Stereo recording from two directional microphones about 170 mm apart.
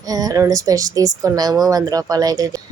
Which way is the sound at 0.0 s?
20° right (ahead or behind).